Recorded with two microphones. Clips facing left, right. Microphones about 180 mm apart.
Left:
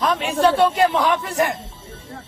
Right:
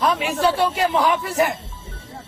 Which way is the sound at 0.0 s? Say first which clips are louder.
Left 1 dB; centre (ahead or behind).